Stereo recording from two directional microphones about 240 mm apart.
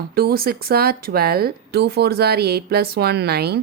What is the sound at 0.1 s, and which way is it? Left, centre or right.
A woman's voice, right.